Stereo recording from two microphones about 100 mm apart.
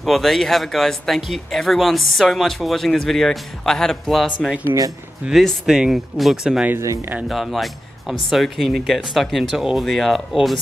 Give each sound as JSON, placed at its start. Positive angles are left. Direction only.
{"t": 0.0, "sound": "speech", "side_deg": 0}